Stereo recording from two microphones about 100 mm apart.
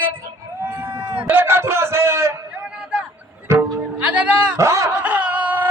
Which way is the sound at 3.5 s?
30° right (ahead or behind).